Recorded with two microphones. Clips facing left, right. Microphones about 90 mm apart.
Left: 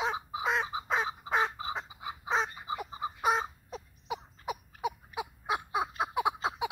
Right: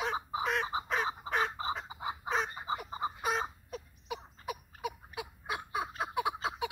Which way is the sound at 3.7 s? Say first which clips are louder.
Left 2 dB; 25° left (ahead or behind).